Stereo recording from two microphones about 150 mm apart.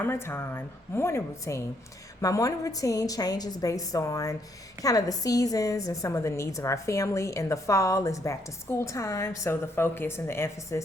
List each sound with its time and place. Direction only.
0.0 s a woman's voice: 15° left (ahead or behind)